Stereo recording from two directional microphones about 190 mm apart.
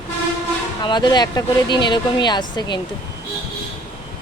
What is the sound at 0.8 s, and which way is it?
Speech, 25° left (ahead or behind).